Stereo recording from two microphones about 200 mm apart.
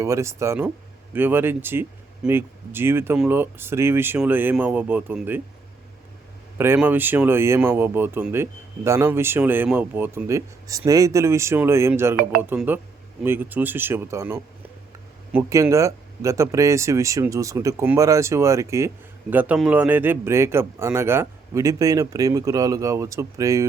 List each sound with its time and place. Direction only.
0.0 s speech: 15° right (ahead or behind)
6.6 s speech: 10° right (ahead or behind)